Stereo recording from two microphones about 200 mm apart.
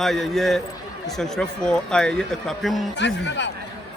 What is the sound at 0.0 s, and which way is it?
A man's voice, centre (ahead or behind).